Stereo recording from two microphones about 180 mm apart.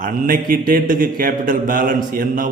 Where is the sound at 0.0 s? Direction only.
50° right (ahead or behind).